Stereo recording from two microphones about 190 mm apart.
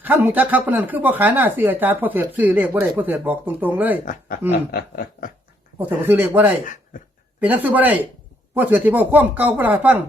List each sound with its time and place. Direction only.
0.0 s speech: 10° right (ahead or behind)
4.7 s a sound: 50° left (ahead or behind)
5.8 s speech: 10° right (ahead or behind)
6.9 s speech: 45° left (ahead or behind)
7.3 s speech: 10° right (ahead or behind)